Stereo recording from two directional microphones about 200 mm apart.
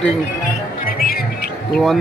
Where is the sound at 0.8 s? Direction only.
45° left (ahead or behind).